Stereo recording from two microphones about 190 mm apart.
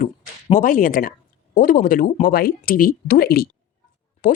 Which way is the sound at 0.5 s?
45° left (ahead or behind).